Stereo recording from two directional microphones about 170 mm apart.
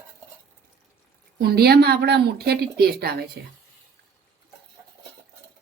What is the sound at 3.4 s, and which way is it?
Speech, 75° right (ahead or behind).